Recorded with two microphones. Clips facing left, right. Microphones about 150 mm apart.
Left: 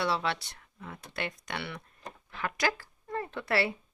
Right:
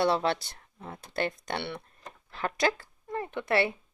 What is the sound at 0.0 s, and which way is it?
Speech, 40° right (ahead or behind).